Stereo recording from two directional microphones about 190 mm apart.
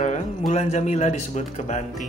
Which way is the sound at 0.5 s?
40° left (ahead or behind).